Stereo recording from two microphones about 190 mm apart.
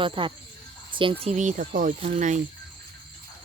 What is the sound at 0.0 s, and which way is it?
Speech, 25° right (ahead or behind).